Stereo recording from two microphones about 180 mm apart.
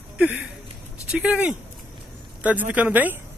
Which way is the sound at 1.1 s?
5° right (ahead or behind).